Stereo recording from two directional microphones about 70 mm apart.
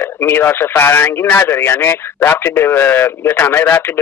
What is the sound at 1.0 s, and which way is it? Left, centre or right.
Speech, left.